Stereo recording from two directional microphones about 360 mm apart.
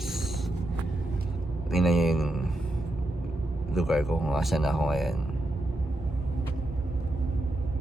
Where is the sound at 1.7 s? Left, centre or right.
Centre.